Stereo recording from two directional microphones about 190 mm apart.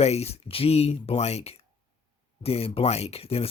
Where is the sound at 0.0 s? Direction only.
35° left (ahead or behind).